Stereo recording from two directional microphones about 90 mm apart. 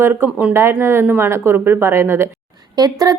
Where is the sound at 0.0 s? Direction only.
25° right (ahead or behind).